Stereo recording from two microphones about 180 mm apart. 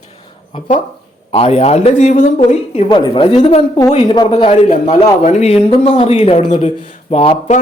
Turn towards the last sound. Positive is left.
turn(degrees=35)  # may be behind; listen again after turning